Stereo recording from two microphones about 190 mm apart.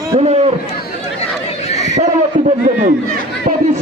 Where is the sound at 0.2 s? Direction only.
35° right (ahead or behind).